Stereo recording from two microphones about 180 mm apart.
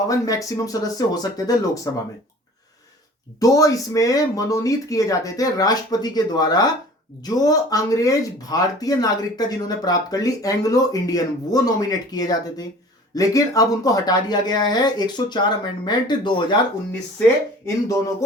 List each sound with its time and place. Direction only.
0.1 s speech: 20° left (ahead or behind)
3.4 s speech: 20° left (ahead or behind)